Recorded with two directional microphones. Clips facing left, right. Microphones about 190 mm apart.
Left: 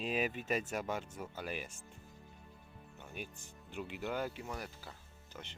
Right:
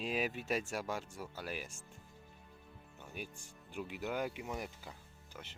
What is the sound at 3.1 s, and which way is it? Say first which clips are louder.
Speech: even; 10° right (ahead or behind).